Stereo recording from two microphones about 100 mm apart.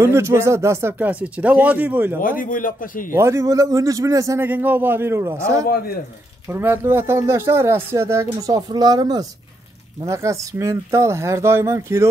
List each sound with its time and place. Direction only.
0.0 s speech: 25° right (ahead or behind)
3.1 s speech: 30° right (ahead or behind)
4.4 s speech: 20° right (ahead or behind); by 9.2 s 40° right (ahead or behind)
10.0 s speech: 30° right (ahead or behind)